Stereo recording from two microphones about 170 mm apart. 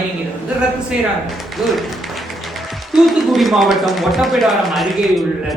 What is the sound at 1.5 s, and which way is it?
Speech, centre (ahead or behind).